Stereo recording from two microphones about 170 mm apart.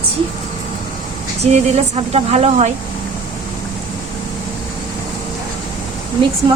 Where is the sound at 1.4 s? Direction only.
40° right (ahead or behind).